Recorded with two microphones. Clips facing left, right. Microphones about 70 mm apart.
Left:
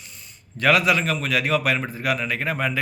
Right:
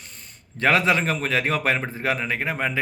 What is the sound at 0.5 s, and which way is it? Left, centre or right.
A man's voice, right.